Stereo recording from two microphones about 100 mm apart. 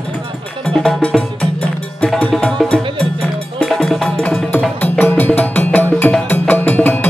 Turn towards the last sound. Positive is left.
turn(degrees=15)  # may be behind; listen again after turning